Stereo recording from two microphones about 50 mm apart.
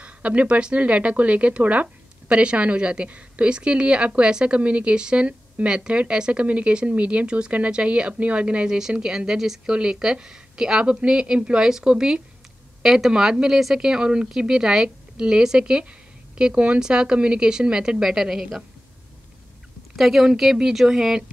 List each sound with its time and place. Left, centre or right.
0.0 s a woman's voice: right
8.6 s a woman's voice: centre
20.0 s a woman's voice: centre